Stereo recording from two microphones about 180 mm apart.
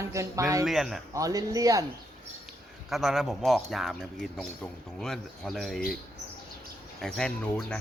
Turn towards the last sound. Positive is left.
turn(degrees=5)  # may be behind; listen again after turning